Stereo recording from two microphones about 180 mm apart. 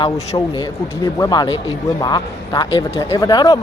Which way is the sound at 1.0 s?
20° left (ahead or behind).